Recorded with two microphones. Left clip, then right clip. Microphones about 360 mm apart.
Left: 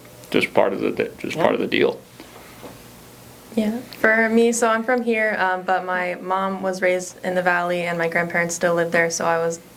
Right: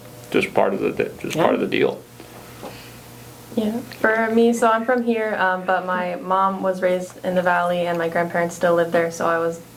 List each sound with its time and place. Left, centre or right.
0.3 s speech: left
4.0 s a woman's voice: left